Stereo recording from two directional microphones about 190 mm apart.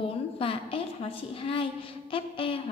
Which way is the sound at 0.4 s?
30° left (ahead or behind).